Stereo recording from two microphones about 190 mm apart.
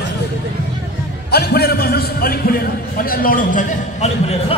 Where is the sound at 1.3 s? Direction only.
55° left (ahead or behind).